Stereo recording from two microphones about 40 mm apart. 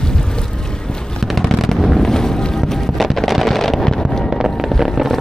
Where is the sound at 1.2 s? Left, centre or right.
Centre.